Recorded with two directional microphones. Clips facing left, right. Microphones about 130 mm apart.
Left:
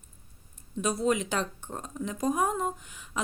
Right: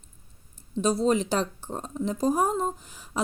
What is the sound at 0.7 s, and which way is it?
Speech, 30° right (ahead or behind).